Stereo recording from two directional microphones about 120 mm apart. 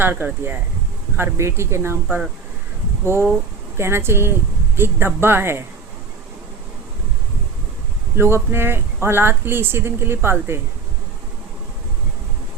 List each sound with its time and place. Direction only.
0.0 s speech: 15° right (ahead or behind)
8.1 s speech: 20° right (ahead or behind)